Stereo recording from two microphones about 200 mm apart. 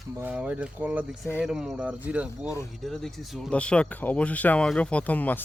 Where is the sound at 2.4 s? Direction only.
15° left (ahead or behind).